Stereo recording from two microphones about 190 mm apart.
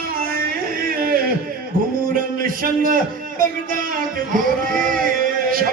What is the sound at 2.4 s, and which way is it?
A man's voice, 50° right (ahead or behind).